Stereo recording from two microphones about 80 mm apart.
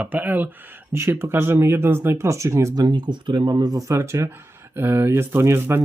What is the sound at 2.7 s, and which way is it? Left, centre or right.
Speech, right.